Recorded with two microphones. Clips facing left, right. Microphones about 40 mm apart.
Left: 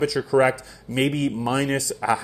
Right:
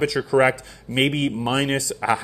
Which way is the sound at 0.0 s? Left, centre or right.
Right.